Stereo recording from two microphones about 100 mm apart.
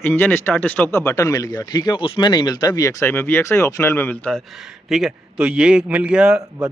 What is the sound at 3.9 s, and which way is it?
Speech, 20° left (ahead or behind).